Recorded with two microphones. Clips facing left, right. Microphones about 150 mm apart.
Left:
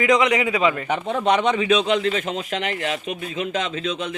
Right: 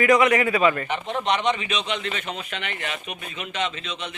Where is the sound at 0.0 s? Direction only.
15° left (ahead or behind).